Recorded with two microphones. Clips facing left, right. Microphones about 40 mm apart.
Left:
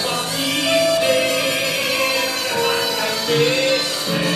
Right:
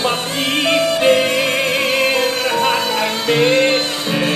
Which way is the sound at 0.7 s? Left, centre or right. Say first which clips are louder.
Right 2 dB; right.